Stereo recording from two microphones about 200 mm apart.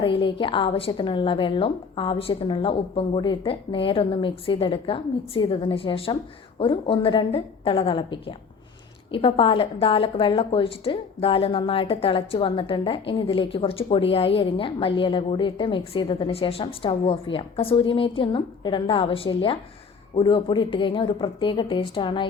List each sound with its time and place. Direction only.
0.0 s a woman's voice: 25° left (ahead or behind)